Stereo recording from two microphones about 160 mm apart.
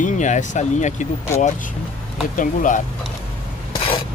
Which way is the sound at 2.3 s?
55° left (ahead or behind).